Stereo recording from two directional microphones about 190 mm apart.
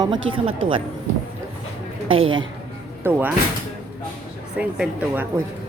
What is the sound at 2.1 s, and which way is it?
Speech, 30° right (ahead or behind).